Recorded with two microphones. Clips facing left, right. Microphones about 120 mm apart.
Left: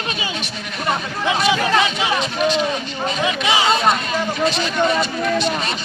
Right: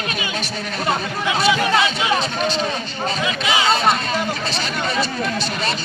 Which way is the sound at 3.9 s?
35° right (ahead or behind).